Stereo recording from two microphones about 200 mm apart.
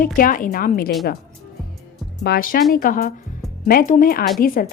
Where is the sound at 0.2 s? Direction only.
45° left (ahead or behind).